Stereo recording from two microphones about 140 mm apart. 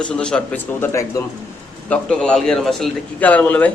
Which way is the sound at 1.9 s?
5° left (ahead or behind).